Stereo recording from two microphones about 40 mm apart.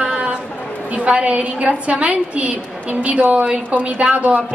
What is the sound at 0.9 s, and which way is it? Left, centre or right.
A woman's voice, right.